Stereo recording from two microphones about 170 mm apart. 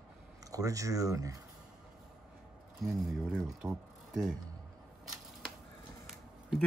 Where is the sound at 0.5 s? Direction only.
20° right (ahead or behind).